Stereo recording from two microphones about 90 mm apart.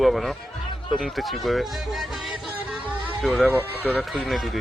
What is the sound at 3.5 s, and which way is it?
Speech, 20° right (ahead or behind).